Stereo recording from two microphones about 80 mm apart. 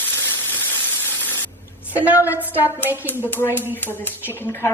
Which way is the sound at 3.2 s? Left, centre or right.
Left.